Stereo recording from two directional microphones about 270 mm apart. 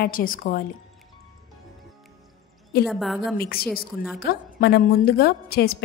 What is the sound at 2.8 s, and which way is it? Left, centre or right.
Speech, centre.